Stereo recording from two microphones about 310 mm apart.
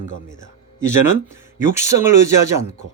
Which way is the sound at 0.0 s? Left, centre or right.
Left.